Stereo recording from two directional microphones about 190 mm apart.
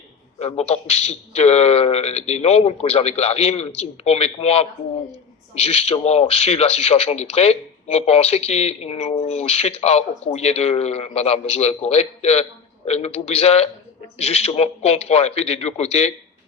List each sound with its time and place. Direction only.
0.3 s a man's voice: 35° left (ahead or behind)